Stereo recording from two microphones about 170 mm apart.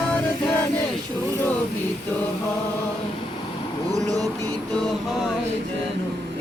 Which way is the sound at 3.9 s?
20° right (ahead or behind).